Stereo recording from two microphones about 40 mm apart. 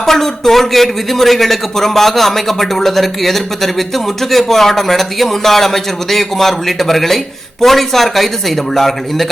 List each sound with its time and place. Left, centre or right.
0.0 s a man's voice: centre